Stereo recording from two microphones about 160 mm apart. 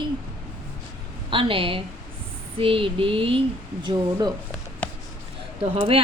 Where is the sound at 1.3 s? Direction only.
35° right (ahead or behind).